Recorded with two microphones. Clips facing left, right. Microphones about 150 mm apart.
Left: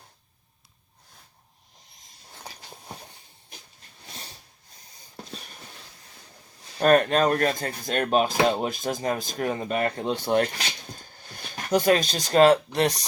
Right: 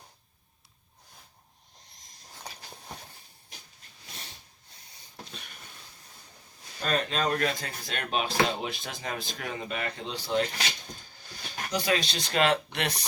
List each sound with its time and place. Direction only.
6.7 s speech: 55° left (ahead or behind)
11.7 s speech: 50° left (ahead or behind)